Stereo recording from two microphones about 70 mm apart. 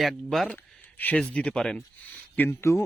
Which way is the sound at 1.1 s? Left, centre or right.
Centre.